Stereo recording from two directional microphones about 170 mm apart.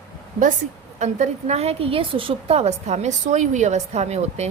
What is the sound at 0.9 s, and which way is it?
A woman's voice, 45° right (ahead or behind).